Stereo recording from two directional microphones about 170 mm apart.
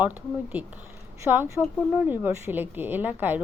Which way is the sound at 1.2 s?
10° right (ahead or behind).